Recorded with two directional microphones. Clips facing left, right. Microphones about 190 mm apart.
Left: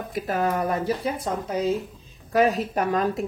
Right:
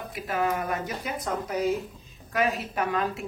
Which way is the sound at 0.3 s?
40° left (ahead or behind).